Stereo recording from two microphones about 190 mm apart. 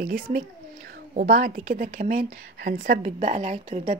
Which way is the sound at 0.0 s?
45° right (ahead or behind).